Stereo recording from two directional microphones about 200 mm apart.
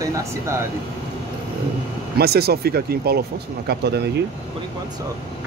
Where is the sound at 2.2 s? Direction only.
55° right (ahead or behind).